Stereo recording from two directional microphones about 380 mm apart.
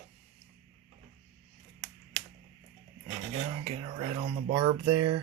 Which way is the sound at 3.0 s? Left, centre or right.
Centre.